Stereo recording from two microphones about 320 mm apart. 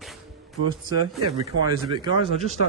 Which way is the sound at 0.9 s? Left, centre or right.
Right.